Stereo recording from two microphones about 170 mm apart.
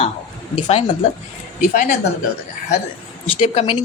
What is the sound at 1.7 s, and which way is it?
Speech, 55° left (ahead or behind).